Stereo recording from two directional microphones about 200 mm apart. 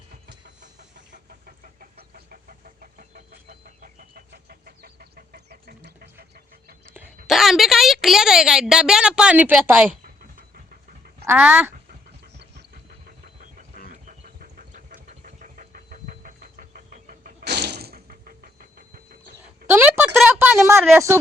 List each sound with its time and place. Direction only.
0.6 s chicken: 40° right (ahead or behind)
7.3 s a woman's voice: centre (ahead or behind)
10.5 s duck: 50° right (ahead or behind)
11.3 s speech: 5° right (ahead or behind)
13.1 s a sound: 45° right (ahead or behind)
19.6 s a sound: 10° right (ahead or behind)
20.9 s speech: 10° right (ahead or behind)